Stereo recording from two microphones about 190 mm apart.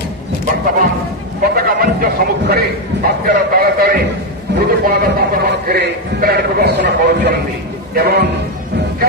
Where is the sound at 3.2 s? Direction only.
55° right (ahead or behind).